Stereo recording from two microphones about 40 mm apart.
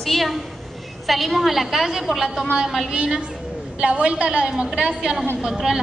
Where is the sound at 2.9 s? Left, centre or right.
Right.